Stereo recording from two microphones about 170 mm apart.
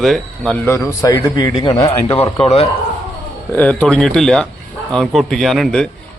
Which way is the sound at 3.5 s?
10° left (ahead or behind).